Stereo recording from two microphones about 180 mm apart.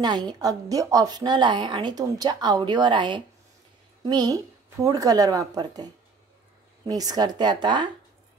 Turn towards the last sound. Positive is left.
turn(degrees=-25)  # may be behind; listen again after turning